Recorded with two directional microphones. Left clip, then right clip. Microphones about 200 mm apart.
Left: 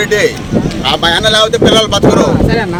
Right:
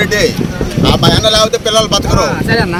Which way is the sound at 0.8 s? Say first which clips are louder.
Right 1 dB; centre (ahead or behind).